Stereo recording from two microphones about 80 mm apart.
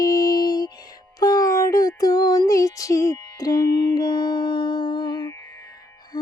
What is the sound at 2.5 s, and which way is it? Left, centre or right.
Music, left.